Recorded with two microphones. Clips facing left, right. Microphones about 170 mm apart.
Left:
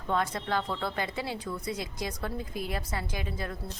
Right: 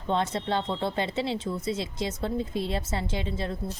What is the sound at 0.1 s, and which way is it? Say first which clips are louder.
A woman's voice: right 3 dB; 25° right (ahead or behind).